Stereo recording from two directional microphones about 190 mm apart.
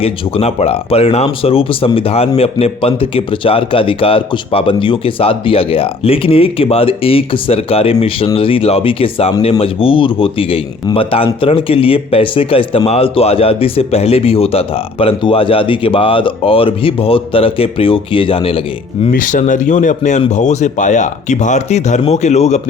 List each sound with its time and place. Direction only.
0.0 s speech: 30° left (ahead or behind)
19.0 s speech: 45° left (ahead or behind)